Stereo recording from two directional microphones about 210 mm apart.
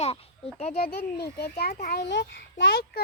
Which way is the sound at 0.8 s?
50° left (ahead or behind).